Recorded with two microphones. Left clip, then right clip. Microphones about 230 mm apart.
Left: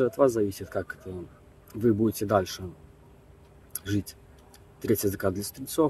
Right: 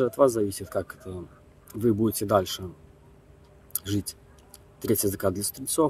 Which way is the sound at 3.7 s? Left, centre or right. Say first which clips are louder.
Right 1 dB; centre.